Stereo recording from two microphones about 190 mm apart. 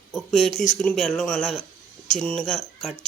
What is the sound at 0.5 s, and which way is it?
Speech, 40° left (ahead or behind).